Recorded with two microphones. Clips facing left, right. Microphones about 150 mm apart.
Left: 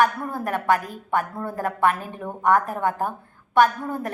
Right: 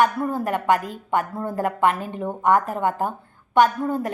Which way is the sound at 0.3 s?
15° right (ahead or behind).